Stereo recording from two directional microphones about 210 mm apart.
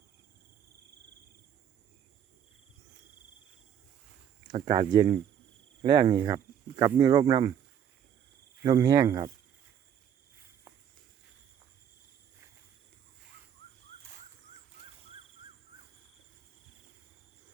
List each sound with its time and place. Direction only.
4.4 s speech: 20° right (ahead or behind)
8.6 s speech: 15° right (ahead or behind)